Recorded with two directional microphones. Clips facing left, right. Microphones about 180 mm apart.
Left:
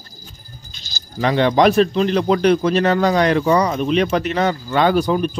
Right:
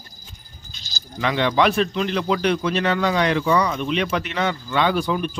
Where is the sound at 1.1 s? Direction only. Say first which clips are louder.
Left 5 dB; 35° left (ahead or behind).